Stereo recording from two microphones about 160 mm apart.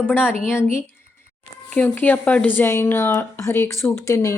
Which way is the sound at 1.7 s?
10° left (ahead or behind).